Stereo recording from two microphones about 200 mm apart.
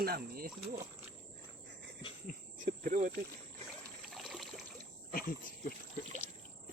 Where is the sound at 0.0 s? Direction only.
50° right (ahead or behind).